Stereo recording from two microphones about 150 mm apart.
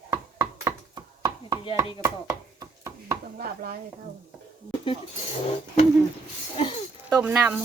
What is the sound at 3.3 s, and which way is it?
Chopping, 80° right.